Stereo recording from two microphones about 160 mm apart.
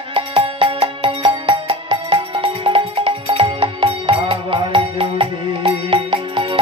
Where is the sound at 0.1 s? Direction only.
35° right (ahead or behind).